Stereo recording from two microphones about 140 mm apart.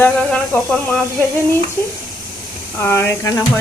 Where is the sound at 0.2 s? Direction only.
5° left (ahead or behind).